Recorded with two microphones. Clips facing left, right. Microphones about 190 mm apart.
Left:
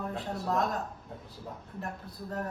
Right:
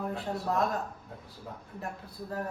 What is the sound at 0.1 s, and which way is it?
Speech, centre (ahead or behind).